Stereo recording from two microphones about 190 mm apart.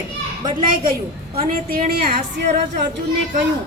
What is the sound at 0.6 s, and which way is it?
A woman's voice, 45° right (ahead or behind).